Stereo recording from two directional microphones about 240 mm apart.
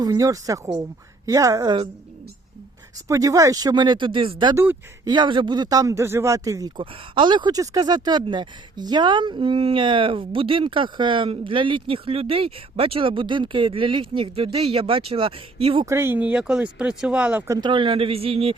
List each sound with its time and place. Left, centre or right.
0.0 s speech: centre
3.1 s speech: centre
17.6 s speech: centre